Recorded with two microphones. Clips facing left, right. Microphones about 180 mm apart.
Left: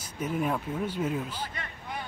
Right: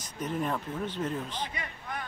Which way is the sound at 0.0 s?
10° left (ahead or behind).